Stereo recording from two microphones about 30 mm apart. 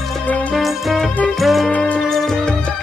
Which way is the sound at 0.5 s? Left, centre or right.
Centre.